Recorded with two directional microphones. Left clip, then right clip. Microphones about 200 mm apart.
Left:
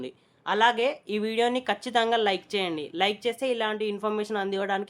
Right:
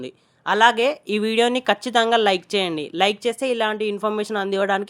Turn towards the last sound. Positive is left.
turn(degrees=-25)  # may be behind; listen again after turning